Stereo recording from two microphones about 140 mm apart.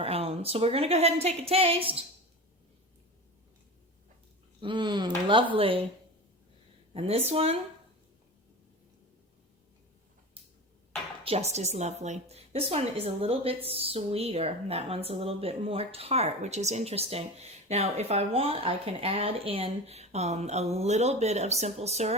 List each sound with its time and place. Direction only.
0.0 s a woman's voice: 45° right (ahead or behind)
4.6 s speech: 35° right (ahead or behind)
6.9 s a woman's voice: 45° right (ahead or behind)
11.2 s a woman's voice: 45° right (ahead or behind)